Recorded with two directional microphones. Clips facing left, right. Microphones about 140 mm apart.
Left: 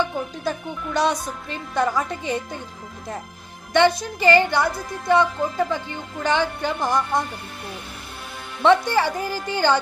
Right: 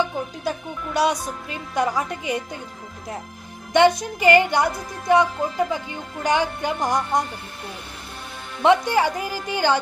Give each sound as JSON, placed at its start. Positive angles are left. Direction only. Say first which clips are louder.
{"t": 0.5, "sound": "a woman's voice", "louder": "left 1 dB", "side_deg": -10}
{"t": 3.7, "sound": "a woman's voice", "louder": "right 1 dB", "side_deg": -20}
{"t": 8.6, "sound": "a woman's voice", "louder": "even", "side_deg": -15}